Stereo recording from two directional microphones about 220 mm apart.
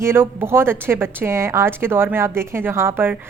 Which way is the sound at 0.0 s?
10° right (ahead or behind).